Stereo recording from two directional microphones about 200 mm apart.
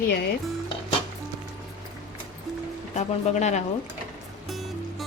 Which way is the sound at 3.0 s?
35° left (ahead or behind).